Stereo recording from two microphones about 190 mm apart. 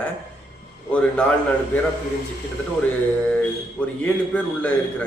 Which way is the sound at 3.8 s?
5° left (ahead or behind).